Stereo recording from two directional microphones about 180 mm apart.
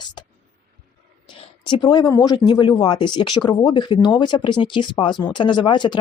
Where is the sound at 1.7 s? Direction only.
25° left (ahead or behind).